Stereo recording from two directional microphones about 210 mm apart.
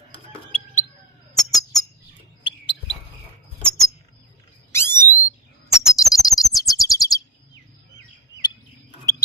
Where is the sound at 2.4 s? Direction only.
25° left (ahead or behind).